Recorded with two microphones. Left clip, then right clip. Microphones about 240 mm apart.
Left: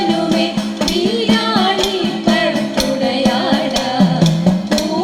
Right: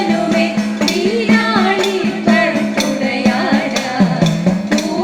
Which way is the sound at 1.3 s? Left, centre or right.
Left.